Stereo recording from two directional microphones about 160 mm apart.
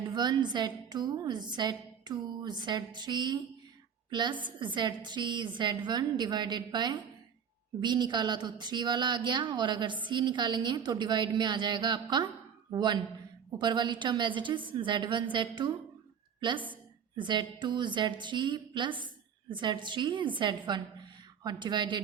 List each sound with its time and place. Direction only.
0.1 s a woman's voice: 25° right (ahead or behind)